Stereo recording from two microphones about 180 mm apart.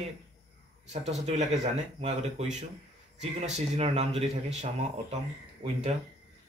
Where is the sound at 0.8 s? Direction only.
40° right (ahead or behind).